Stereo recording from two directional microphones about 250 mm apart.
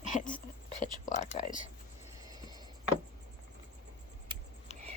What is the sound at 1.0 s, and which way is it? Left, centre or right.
Speech, left.